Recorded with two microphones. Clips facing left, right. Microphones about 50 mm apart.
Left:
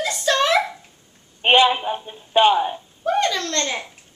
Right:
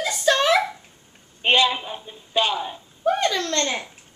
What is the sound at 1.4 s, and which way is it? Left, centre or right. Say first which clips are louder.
A woman's voice: left 4 dB; centre.